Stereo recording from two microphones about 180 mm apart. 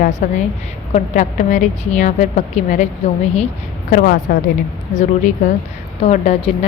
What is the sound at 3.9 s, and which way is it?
A woman's voice, 50° left (ahead or behind).